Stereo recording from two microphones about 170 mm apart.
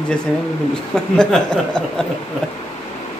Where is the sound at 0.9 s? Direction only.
5° left (ahead or behind).